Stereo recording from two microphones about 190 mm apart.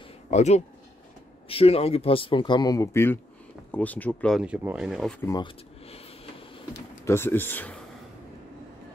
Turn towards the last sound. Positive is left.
turn(degrees=10)  # may be behind; listen again after turning